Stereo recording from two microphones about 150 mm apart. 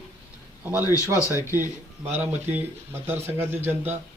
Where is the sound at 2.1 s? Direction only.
15° right (ahead or behind).